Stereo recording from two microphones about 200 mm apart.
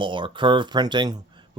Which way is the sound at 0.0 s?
25° right (ahead or behind).